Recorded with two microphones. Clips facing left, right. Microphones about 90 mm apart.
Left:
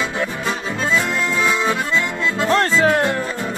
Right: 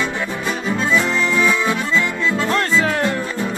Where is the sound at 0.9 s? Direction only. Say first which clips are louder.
Right 2 dB; 20° left (ahead or behind).